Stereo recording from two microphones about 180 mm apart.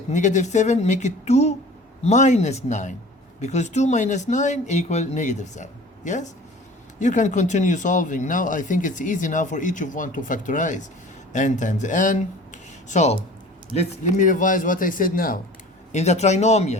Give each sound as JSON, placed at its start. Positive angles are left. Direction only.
{"t": 0.1, "sound": "speech", "side_deg": 40}
{"t": 15.9, "sound": "speech", "side_deg": 40}